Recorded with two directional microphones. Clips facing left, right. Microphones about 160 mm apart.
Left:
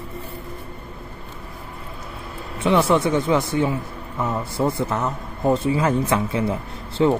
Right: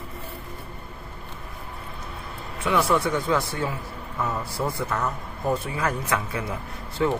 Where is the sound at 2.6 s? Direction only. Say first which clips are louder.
Left 5 dB; 25° left (ahead or behind).